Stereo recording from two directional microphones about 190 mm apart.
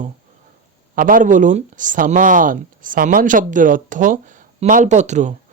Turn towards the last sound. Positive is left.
turn(degrees=-40)  # may be behind; listen again after turning